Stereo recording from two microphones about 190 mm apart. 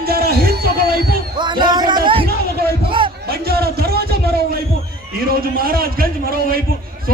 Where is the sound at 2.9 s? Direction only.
25° right (ahead or behind).